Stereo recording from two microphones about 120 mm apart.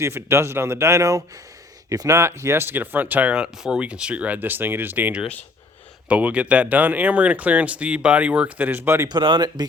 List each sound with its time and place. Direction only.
0.0 s speech: 20° right (ahead or behind)
9.0 s speech: 40° right (ahead or behind)